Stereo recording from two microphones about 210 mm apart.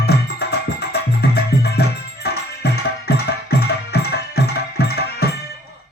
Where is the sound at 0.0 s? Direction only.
50° left (ahead or behind).